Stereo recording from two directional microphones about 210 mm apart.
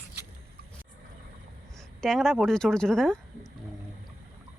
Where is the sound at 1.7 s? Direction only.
Centre (ahead or behind).